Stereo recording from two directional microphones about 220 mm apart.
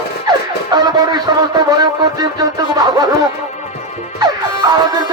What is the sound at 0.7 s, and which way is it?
Speech, 20° right (ahead or behind).